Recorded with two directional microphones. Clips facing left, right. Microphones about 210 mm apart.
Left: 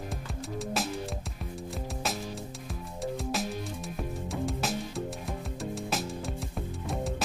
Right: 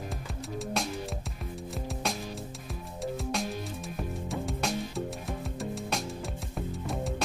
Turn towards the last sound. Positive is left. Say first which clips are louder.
# even
turn(degrees=0)  # may be behind; listen again after turning